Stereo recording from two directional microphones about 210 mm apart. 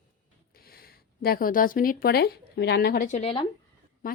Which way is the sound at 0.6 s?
45° left (ahead or behind).